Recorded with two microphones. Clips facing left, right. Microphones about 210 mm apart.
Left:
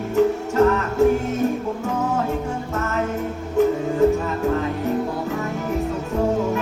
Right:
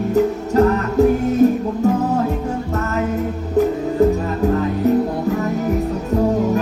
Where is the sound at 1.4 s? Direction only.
35° right (ahead or behind).